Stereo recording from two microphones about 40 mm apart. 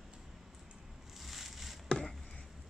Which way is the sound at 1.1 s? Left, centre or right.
Centre.